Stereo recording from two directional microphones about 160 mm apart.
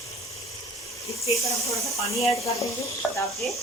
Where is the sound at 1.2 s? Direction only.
40° left (ahead or behind).